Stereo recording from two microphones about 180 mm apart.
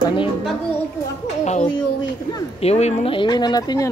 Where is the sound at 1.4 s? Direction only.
40° left (ahead or behind); by 3.9 s 20° left (ahead or behind).